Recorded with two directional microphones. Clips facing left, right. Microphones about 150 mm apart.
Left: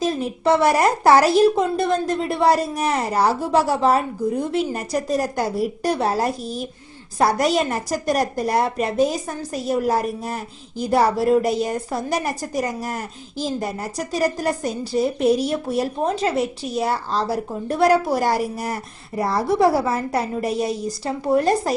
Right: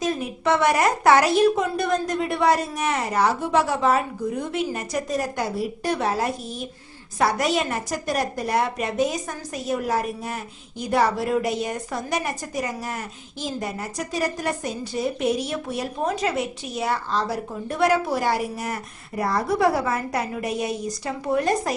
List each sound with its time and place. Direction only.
0.0 s a woman's voice: 30° left (ahead or behind)